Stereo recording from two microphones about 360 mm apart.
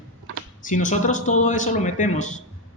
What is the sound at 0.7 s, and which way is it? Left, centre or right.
Speech, left.